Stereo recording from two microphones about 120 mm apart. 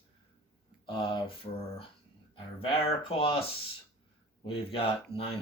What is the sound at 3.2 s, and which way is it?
Speech, 50° left (ahead or behind).